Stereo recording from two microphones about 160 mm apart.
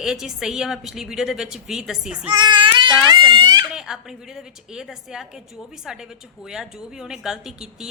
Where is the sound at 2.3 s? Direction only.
30° right (ahead or behind).